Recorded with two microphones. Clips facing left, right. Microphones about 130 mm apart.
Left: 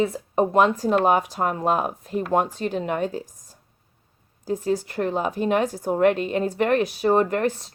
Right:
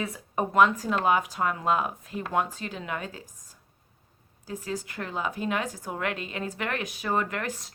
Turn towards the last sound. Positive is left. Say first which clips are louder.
# left 9 dB
turn(degrees=45)  # may be behind; listen again after turning